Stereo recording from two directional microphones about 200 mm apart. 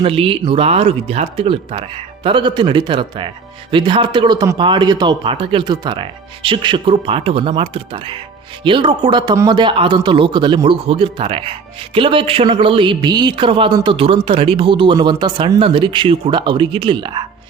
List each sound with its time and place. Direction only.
0.0 s a man's voice: 30° right (ahead or behind)